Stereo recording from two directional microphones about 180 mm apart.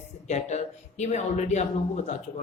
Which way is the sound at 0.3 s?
40° left (ahead or behind).